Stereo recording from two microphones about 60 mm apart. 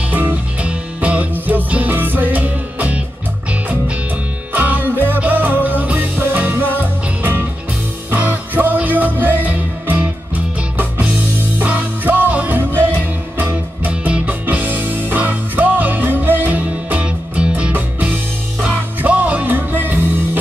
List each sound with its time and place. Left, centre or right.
0.1 s music: right
4.5 s music: right